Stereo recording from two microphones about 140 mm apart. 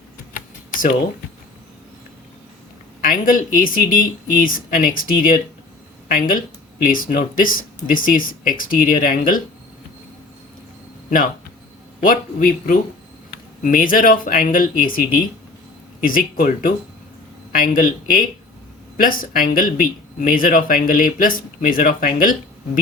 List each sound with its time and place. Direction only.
0.3 s tick-tock: 75° left (ahead or behind)
3.0 s speech: 80° left
11.9 s speech: 80° left
13.6 s speech: 75° left (ahead or behind); by 15.3 s 90° left
16.0 s speech: 80° left
18.9 s speech: 90° left